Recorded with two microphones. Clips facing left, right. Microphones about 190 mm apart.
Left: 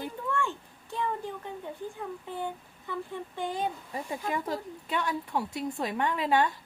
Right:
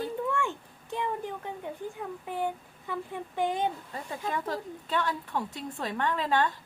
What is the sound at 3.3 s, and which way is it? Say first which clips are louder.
Speech: right 5 dB; 20° right (ahead or behind).